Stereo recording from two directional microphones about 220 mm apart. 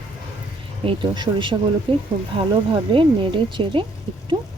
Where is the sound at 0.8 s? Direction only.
20° right (ahead or behind).